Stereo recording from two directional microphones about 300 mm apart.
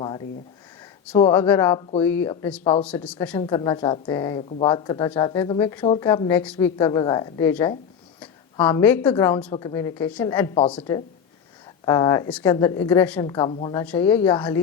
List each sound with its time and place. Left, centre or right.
1.1 s a woman's voice: centre